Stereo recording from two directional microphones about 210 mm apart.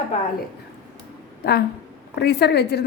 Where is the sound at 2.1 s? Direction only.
50° left (ahead or behind).